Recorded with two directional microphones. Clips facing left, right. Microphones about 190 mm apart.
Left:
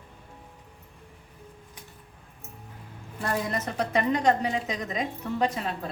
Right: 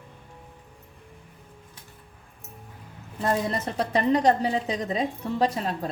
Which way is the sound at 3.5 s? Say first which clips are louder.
Right 1 dB; 35° right (ahead or behind).